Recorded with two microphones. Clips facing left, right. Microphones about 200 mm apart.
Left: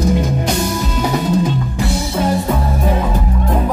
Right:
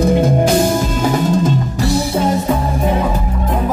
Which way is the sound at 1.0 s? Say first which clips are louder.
Left 1 dB; 45° right (ahead or behind).